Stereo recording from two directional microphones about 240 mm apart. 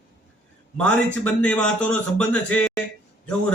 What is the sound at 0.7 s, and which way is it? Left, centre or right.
A man's voice, centre.